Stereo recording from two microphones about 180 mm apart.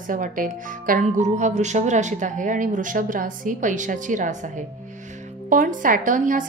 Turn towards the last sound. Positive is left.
turn(degrees=-45)  # may be behind; listen again after turning